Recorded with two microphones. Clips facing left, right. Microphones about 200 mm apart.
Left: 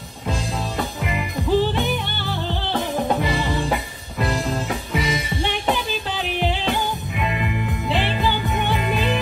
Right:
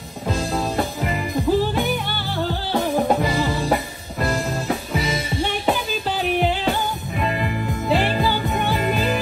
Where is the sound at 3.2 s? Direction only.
45° right (ahead or behind).